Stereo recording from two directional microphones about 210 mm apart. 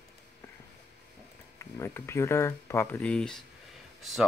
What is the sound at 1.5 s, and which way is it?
Speech, 10° left (ahead or behind).